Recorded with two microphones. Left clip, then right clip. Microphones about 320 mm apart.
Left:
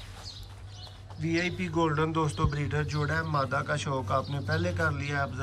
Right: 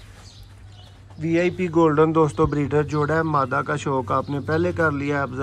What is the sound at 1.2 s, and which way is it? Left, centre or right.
A man's voice, centre.